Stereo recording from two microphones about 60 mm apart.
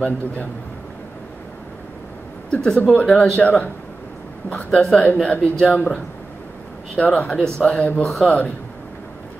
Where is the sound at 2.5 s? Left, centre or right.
Centre.